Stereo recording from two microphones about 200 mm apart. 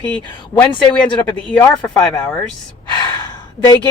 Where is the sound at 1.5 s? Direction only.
10° left (ahead or behind).